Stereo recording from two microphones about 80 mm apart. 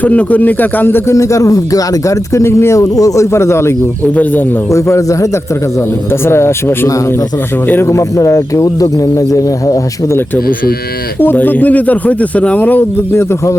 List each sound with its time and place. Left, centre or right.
0.0 s speech: centre
1.1 s speech: left
4.0 s speech: left
4.7 s speech: left
6.1 s speech: left
11.2 s speech: left